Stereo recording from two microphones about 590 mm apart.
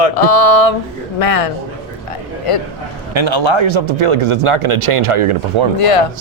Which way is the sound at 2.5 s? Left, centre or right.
Left.